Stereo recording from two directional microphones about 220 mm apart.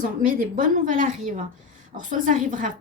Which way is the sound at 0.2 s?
40° right (ahead or behind).